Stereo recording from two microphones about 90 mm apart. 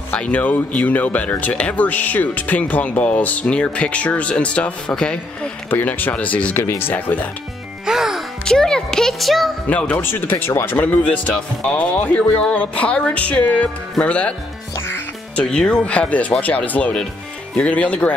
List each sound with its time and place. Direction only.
0.1 s speech: 15° left (ahead or behind)
6.6 s speech: 25° left (ahead or behind)
7.8 s music: 5° right (ahead or behind)
8.5 s a child's voice: 10° left (ahead or behind)
9.7 s speech: 15° left (ahead or behind)
15.4 s speech: 10° left (ahead or behind)